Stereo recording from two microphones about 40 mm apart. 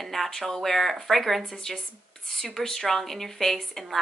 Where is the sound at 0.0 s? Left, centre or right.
Centre.